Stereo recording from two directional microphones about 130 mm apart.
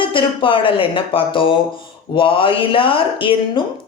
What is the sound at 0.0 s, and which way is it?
Speech, 40° left (ahead or behind).